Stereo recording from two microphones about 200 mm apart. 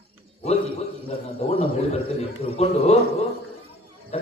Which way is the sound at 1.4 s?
30° left (ahead or behind).